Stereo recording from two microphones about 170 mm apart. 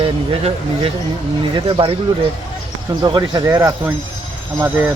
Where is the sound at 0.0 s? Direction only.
35° right (ahead or behind).